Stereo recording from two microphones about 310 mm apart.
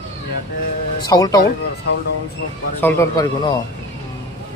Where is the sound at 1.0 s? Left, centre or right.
Centre.